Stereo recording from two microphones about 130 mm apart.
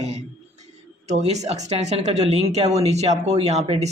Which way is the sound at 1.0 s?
60° right (ahead or behind).